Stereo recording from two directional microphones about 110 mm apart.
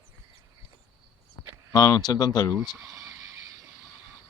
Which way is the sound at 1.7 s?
30° left (ahead or behind).